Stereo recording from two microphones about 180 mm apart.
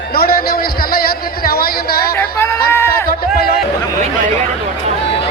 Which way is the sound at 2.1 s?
15° left (ahead or behind).